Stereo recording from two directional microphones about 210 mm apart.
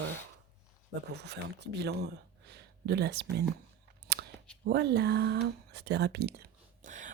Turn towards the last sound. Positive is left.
turn(degrees=-35)  # may be behind; listen again after turning